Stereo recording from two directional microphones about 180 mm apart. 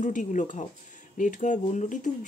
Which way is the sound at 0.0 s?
45° left (ahead or behind).